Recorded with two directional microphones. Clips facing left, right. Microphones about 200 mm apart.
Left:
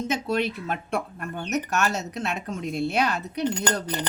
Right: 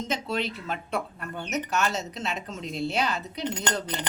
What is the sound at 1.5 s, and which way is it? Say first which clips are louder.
Speech: left 2 dB; 60° left (ahead or behind).